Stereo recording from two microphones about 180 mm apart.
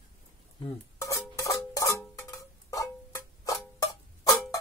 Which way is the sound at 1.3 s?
15° left (ahead or behind).